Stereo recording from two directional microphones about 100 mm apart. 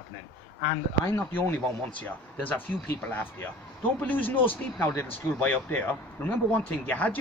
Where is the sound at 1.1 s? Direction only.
20° left (ahead or behind).